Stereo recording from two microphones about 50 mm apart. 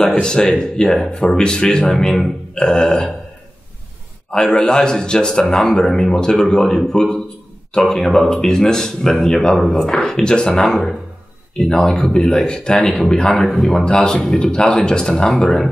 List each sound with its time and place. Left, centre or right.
0.2 s a man's voice: centre
4.3 s a man's voice: centre